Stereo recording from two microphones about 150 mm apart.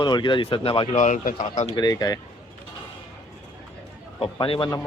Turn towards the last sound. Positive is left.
turn(degrees=35)  # may be behind; listen again after turning